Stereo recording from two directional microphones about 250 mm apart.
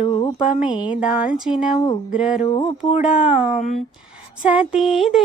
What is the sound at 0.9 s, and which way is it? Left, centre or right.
Speech, centre.